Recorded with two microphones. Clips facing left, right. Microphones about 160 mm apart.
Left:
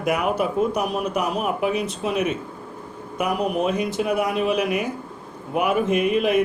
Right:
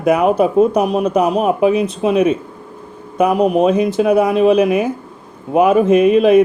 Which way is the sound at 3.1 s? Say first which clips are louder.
Right 10 dB; 25° right (ahead or behind).